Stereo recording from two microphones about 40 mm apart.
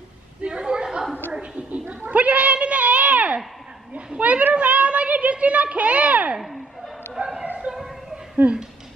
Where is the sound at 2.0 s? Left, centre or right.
Right.